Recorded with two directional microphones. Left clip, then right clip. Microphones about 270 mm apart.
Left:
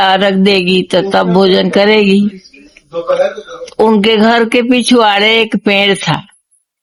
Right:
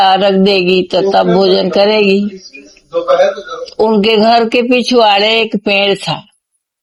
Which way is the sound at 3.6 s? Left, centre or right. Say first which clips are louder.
Left 1 dB; left.